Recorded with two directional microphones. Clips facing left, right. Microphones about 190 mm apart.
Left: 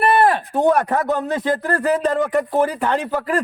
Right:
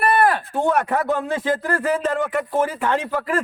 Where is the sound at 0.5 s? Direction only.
35° left (ahead or behind).